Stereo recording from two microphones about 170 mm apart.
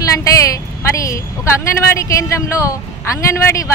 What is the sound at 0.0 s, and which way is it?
A woman's voice, 20° left (ahead or behind).